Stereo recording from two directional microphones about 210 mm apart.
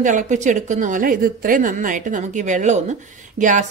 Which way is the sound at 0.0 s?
35° right (ahead or behind).